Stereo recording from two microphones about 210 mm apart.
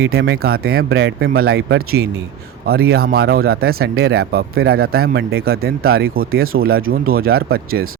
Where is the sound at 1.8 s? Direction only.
90° right.